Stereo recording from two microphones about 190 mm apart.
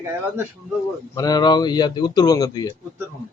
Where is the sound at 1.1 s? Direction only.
20° left (ahead or behind).